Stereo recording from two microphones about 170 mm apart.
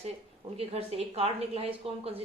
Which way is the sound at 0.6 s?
35° right (ahead or behind).